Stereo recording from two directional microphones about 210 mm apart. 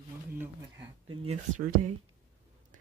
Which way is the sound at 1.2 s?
40° right (ahead or behind).